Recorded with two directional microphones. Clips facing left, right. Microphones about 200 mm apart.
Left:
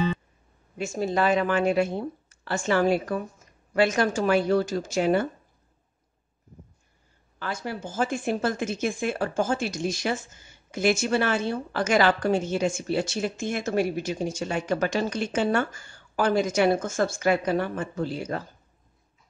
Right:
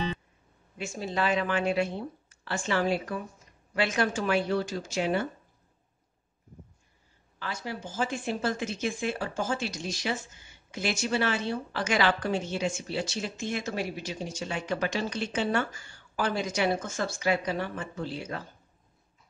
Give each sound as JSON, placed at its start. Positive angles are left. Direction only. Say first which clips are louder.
{"t": 0.7, "sound": "a woman's voice", "louder": "left 6 dB", "side_deg": 45}
{"t": 7.3, "sound": "a woman's voice", "louder": "left 4 dB", "side_deg": 50}